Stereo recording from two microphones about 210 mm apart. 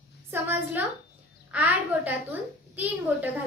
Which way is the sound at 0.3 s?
10° right (ahead or behind).